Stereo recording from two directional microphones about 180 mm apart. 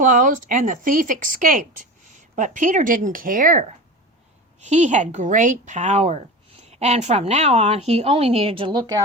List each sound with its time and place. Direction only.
0.0 s a woman's voice: 45° right (ahead or behind); by 9.0 s 25° right (ahead or behind)